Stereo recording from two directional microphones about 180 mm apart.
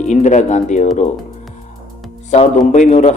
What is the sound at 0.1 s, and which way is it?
Speech, 40° left (ahead or behind).